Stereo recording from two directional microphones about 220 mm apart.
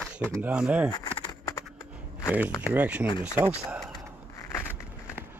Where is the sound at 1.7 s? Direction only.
5° right (ahead or behind).